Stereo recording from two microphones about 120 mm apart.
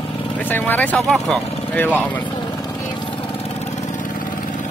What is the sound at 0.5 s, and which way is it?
Speech, 15° left (ahead or behind).